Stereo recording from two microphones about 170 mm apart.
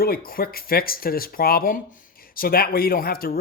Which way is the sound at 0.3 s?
60° left (ahead or behind).